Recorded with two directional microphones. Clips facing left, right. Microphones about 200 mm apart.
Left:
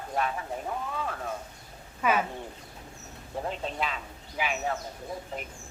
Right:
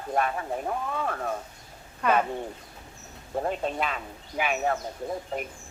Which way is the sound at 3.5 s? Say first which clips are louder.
Right 3 dB; 50° right (ahead or behind).